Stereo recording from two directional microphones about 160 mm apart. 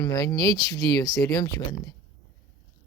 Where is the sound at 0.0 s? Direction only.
25° left (ahead or behind).